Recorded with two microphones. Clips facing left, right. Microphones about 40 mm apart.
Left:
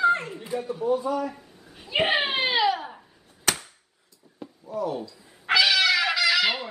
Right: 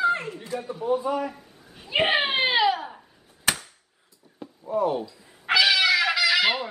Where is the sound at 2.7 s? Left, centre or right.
Centre.